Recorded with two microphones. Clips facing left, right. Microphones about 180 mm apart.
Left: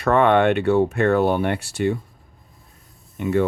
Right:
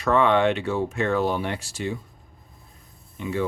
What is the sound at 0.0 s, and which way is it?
Speech, 60° left (ahead or behind).